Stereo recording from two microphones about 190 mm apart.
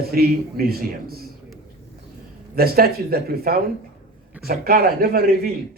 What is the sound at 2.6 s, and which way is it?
A man's voice, 55° right (ahead or behind).